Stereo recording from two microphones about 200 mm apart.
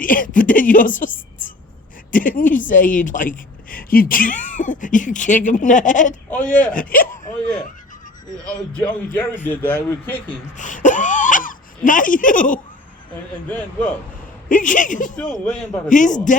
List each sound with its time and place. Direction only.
0.0 s a woman's voice: 45° left (ahead or behind)
6.3 s speech: 5° left (ahead or behind)
6.7 s speech: 45° left (ahead or behind)
9.4 s speech: 10° left (ahead or behind)
10.6 s throat clearing: 40° left (ahead or behind)
13.5 s speech: 5° left (ahead or behind)
14.5 s a woman's voice: 40° left (ahead or behind)
15.1 s speech: 5° left (ahead or behind)
15.9 s a woman's voice: 40° left (ahead or behind)